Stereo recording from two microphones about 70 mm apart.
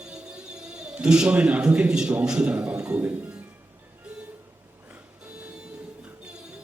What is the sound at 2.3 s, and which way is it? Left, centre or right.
A man's voice, centre.